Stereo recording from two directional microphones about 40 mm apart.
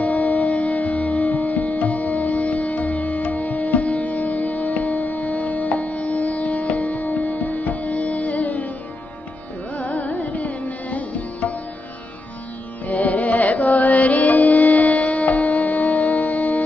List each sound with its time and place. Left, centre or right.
0.0 s music: left
9.8 s music: left
12.8 s music: left